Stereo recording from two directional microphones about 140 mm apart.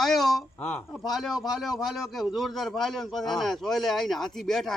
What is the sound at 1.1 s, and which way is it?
Speech, centre (ahead or behind).